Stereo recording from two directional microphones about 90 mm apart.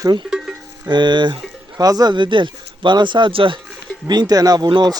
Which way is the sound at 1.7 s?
45° right (ahead or behind).